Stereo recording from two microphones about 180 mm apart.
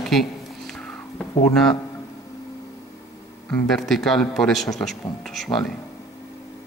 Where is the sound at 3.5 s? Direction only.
5° left (ahead or behind).